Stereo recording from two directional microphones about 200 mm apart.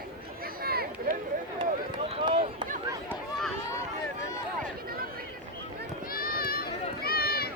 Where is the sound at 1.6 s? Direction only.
30° right (ahead or behind).